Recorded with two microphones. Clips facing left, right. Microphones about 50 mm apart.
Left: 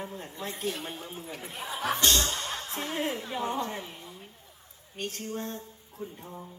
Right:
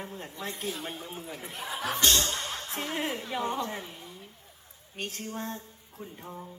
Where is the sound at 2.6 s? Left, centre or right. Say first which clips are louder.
Even; right.